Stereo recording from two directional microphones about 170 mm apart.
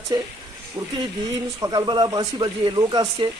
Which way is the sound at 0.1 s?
25° right (ahead or behind).